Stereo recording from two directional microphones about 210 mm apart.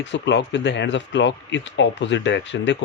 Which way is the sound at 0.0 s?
60° left (ahead or behind).